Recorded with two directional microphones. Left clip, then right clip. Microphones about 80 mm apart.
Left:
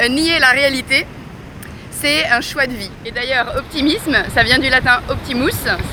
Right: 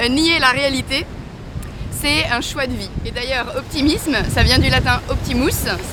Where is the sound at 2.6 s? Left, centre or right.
Right.